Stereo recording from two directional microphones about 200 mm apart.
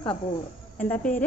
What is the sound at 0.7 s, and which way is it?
Speech, 10° left (ahead or behind).